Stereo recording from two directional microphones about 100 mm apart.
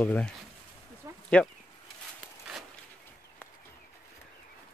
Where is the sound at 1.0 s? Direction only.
30° right (ahead or behind).